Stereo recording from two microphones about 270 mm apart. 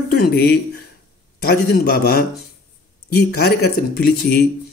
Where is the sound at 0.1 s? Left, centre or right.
Left.